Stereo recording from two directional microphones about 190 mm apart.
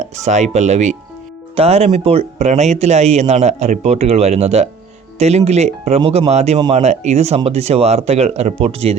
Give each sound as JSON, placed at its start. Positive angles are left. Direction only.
{"t": 0.0, "sound": "speech", "side_deg": -40}